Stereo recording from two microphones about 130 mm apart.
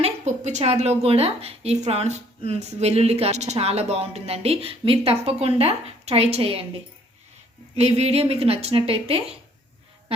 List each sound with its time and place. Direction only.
0.0 s a woman's voice: 65° right (ahead or behind); by 6.7 s 50° right (ahead or behind)
7.8 s a woman's voice: 55° right (ahead or behind)